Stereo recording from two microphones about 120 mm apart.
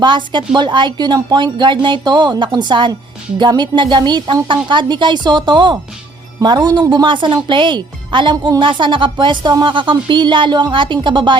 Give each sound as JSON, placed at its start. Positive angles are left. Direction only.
{"t": 0.0, "sound": "speech", "side_deg": -40}